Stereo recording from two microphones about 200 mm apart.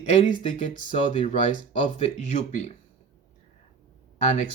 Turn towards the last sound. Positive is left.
turn(degrees=35)  # may be behind; listen again after turning